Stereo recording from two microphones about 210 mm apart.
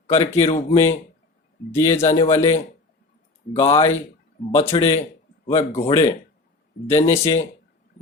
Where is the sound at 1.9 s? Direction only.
30° left (ahead or behind).